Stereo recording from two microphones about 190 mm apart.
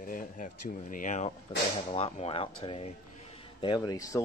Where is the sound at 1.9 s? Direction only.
30° left (ahead or behind).